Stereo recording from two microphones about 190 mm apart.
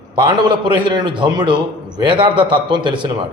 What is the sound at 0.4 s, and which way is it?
A man's voice, 25° right (ahead or behind).